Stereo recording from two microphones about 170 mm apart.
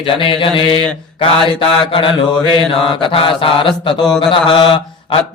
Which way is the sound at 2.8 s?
30° left (ahead or behind).